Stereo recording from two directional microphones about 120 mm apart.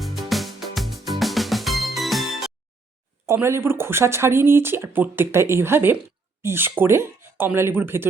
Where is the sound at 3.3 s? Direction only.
20° right (ahead or behind).